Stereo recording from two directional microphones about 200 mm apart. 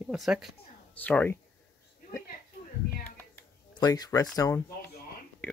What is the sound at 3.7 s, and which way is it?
Speech, 20° left (ahead or behind).